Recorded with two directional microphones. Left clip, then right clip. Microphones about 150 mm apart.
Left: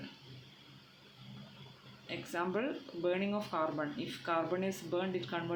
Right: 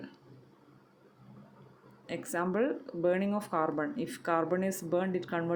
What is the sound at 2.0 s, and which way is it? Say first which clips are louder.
Speech: right 4 dB; 50° right (ahead or behind).